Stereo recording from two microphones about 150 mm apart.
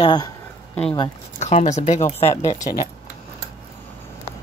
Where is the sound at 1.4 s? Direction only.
50° left (ahead or behind).